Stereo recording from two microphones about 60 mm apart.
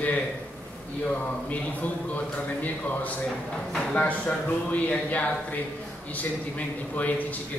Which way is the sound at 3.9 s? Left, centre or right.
Left.